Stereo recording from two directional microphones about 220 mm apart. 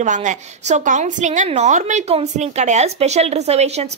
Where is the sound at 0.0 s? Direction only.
35° right (ahead or behind).